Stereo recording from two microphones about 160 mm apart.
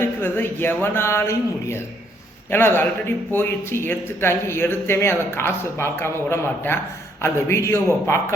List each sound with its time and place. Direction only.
0.0 s speech: 15° left (ahead or behind)